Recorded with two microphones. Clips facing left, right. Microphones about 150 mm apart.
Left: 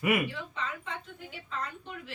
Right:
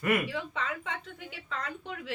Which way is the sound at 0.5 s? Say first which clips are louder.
Right 2 dB; 90° right.